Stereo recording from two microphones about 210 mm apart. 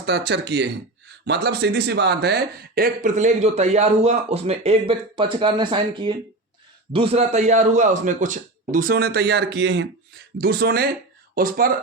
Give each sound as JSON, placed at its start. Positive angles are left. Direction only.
{"t": 0.3, "sound": "speech", "side_deg": -55}